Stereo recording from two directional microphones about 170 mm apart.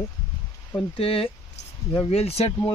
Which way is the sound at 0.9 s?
35° left (ahead or behind).